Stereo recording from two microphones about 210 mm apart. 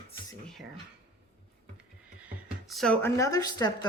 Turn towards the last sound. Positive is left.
turn(degrees=20)  # may be behind; listen again after turning